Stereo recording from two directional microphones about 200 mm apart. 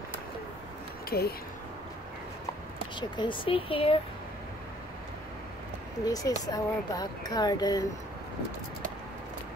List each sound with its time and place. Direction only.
1.1 s speech: 50° left (ahead or behind)
3.0 s speech: 25° left (ahead or behind)
6.0 s speech: 20° left (ahead or behind)